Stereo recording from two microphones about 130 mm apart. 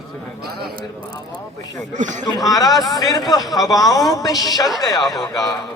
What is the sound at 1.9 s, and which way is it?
Speech, 75° right (ahead or behind).